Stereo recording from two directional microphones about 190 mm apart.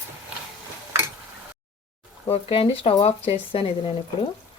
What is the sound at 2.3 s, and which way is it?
Speech, 30° left (ahead or behind).